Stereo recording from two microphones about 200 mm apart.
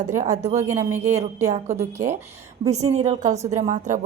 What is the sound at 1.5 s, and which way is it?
Speech, 35° right (ahead or behind).